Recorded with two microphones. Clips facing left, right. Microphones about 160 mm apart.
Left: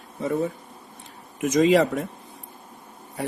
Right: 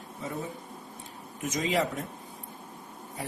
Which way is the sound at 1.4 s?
85° left.